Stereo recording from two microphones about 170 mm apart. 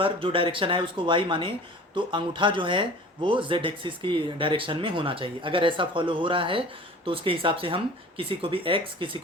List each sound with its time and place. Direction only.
0.0 s speech: 30° right (ahead or behind)